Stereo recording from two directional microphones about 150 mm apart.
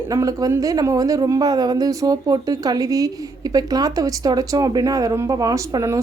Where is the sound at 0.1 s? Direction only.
25° right (ahead or behind).